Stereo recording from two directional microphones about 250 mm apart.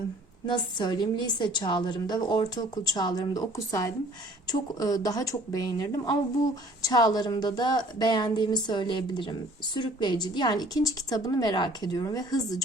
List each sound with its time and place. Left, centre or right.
0.4 s a woman's voice: centre